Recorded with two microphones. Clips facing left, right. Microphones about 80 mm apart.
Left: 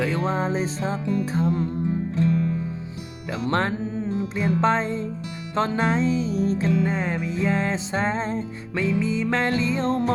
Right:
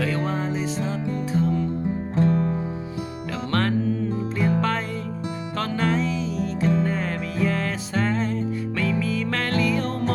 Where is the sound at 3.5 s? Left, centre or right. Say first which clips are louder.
Right 3 dB; left.